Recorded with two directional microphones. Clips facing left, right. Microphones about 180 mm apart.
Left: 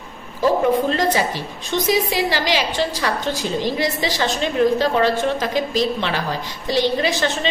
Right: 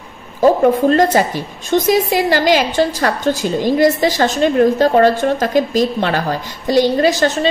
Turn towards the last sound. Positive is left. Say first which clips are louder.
# right 7 dB
turn(degrees=-40)  # may be behind; listen again after turning